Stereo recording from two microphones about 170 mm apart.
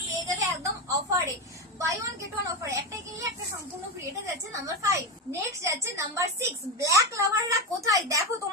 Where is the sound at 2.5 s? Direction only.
20° right (ahead or behind).